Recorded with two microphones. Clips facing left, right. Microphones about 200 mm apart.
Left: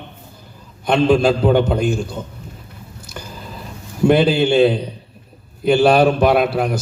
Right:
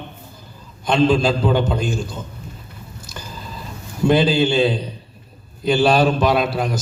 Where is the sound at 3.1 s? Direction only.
60° left (ahead or behind).